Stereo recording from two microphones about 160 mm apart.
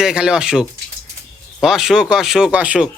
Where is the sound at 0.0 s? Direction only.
5° right (ahead or behind).